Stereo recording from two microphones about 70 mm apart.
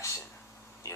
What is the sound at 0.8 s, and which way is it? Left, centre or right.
Speech, left.